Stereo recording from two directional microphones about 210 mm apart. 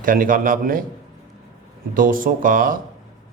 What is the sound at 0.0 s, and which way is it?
Speech, 40° right (ahead or behind).